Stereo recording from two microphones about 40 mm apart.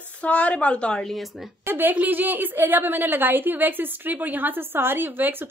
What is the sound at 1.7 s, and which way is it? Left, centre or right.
A woman's voice, right.